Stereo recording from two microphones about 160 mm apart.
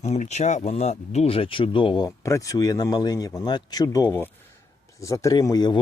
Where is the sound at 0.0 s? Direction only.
45° left (ahead or behind).